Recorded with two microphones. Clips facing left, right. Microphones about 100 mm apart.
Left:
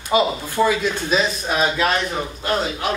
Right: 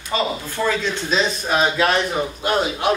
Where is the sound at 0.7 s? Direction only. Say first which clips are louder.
Left 2 dB; 5° left (ahead or behind).